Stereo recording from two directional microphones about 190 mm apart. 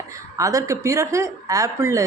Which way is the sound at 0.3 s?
15° right (ahead or behind).